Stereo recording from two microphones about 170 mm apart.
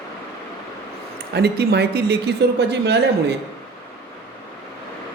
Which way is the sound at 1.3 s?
75° right (ahead or behind).